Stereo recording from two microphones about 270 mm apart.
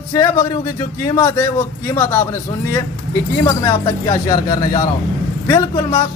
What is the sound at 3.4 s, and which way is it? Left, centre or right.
Speech, centre.